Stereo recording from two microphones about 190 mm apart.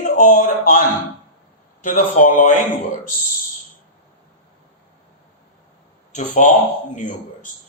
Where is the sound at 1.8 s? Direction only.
45° left (ahead or behind).